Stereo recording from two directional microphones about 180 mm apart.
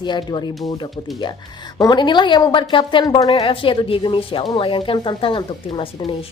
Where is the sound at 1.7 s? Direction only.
20° left (ahead or behind).